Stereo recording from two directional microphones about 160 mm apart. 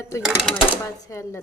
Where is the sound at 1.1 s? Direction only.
15° left (ahead or behind).